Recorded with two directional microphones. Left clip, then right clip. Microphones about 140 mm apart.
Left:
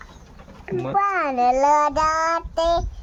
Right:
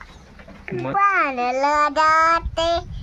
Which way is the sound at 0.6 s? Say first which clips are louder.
Left 1 dB; 5° right (ahead or behind).